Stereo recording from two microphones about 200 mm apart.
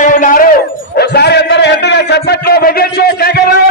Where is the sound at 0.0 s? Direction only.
40° left (ahead or behind).